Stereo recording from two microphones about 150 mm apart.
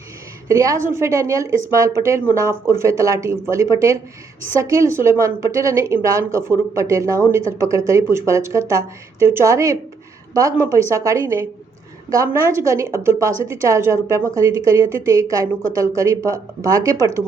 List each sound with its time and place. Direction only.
0.4 s speech: 20° right (ahead or behind)